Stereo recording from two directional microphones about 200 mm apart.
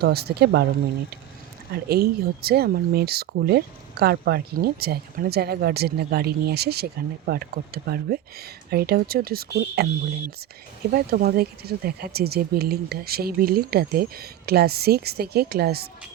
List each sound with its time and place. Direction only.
0.0 s speech: 50° right (ahead or behind)
1.7 s speech: 50° right (ahead or behind)
10.9 s speech: 50° right (ahead or behind)